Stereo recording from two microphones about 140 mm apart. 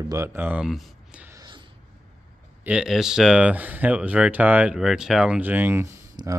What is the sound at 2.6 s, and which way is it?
Speech, 5° right (ahead or behind).